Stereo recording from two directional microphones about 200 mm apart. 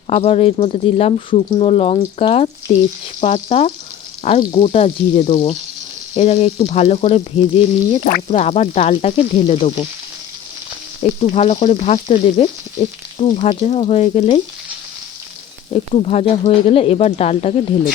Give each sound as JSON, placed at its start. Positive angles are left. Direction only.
{"t": 0.1, "sound": "frying", "side_deg": 30}
{"t": 11.2, "sound": "frying", "side_deg": 30}
{"t": 15.7, "sound": "frying", "side_deg": 30}